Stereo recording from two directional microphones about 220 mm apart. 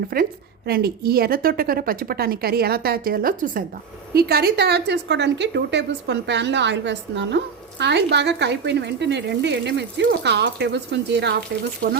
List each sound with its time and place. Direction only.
0.1 s a woman's voice: 40° right (ahead or behind)